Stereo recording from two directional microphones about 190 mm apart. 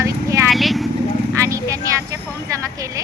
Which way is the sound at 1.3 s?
15° right (ahead or behind).